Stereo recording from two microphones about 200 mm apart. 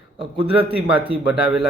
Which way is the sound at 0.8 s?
25° right (ahead or behind).